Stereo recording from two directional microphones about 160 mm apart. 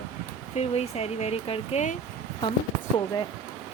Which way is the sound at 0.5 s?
40° left (ahead or behind).